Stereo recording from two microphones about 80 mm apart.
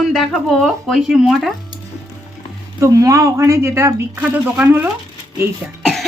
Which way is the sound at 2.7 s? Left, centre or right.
Right.